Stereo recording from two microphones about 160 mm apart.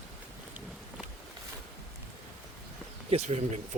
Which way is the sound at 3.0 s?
40° right (ahead or behind).